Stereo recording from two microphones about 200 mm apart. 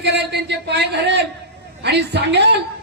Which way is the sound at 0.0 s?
55° right (ahead or behind).